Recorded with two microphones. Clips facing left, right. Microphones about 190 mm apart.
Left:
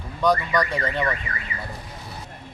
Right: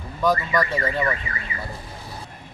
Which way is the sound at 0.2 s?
5° right (ahead or behind).